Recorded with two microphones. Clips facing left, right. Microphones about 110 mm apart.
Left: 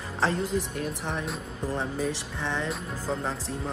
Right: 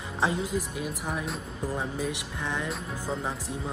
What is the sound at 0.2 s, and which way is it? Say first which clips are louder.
Speech: left 1 dB; 5° right (ahead or behind).